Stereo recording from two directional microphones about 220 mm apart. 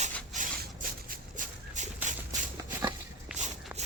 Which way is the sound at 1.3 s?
35° right (ahead or behind).